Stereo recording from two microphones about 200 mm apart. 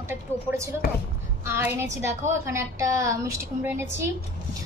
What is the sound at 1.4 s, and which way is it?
A woman's voice, 10° right (ahead or behind).